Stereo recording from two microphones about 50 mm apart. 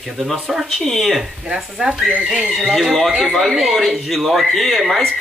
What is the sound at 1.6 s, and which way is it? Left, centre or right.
Speech, centre.